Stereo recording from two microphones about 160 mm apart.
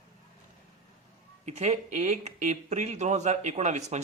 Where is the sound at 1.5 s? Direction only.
45° right (ahead or behind).